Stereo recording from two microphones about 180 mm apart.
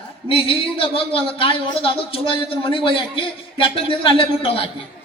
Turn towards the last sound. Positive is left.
turn(degrees=30)  # may be behind; listen again after turning